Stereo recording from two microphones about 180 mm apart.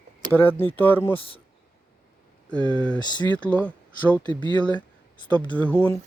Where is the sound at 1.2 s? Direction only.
30° left (ahead or behind).